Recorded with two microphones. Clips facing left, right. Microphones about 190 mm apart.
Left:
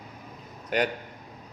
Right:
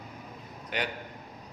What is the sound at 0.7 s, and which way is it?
Speech, 45° left (ahead or behind).